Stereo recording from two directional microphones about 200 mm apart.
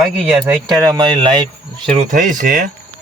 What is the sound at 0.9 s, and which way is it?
Speech, 25° right (ahead or behind).